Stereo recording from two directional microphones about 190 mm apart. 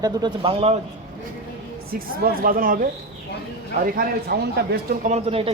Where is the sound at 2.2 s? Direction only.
45° right (ahead or behind).